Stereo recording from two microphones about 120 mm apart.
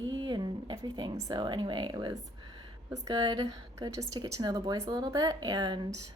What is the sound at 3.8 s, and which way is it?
Speech, 30° right (ahead or behind).